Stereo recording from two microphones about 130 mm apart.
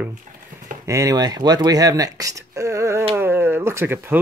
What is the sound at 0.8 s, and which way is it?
Speech, 25° right (ahead or behind).